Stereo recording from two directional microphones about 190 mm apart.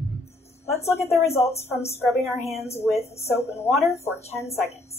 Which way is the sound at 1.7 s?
35° left (ahead or behind).